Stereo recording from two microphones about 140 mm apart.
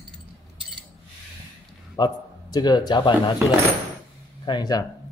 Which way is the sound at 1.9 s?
30° left (ahead or behind).